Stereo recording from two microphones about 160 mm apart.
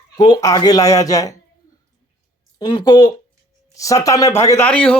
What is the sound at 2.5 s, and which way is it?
A man's voice, 25° left (ahead or behind).